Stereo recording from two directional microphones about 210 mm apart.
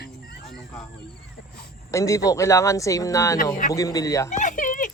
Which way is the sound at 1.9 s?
15° left (ahead or behind).